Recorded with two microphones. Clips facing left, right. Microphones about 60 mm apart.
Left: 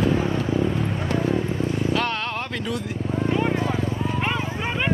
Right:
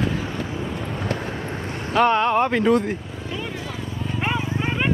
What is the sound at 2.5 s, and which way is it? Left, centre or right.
Speech, right.